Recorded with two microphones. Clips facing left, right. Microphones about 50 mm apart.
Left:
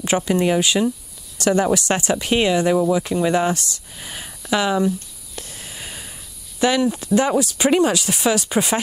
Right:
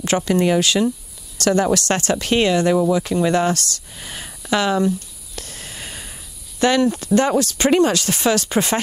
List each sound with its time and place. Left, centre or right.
0.0 s speech: centre
3.9 s speech: centre
5.3 s sniff: centre
6.6 s speech: centre